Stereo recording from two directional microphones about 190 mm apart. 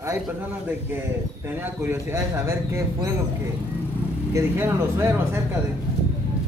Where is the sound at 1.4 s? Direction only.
10° right (ahead or behind).